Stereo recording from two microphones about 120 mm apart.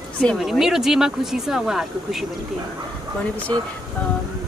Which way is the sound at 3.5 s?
40° right (ahead or behind).